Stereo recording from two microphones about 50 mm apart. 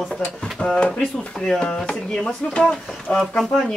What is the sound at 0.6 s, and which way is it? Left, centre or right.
Speech, left.